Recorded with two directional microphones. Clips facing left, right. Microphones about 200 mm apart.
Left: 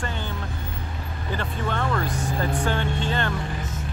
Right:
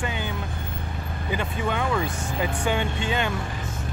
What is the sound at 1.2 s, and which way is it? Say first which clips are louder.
Speech: right 1 dB; 10° right (ahead or behind).